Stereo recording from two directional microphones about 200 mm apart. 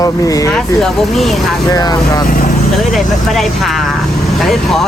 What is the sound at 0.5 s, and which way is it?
Speech, centre (ahead or behind).